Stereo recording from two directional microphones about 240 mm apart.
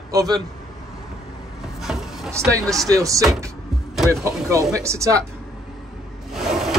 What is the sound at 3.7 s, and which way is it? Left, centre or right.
Music, centre.